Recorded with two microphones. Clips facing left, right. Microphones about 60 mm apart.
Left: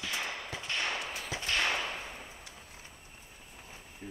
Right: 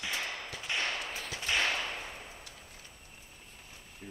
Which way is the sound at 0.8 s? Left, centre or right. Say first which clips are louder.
Left 1 dB; centre.